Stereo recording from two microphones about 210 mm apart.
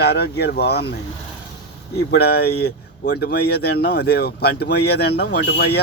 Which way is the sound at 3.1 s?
50° left (ahead or behind).